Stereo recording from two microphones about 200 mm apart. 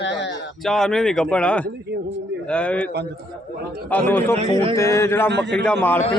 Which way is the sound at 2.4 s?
5° left (ahead or behind).